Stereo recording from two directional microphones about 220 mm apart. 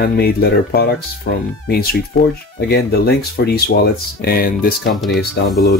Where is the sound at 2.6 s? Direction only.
45° left (ahead or behind).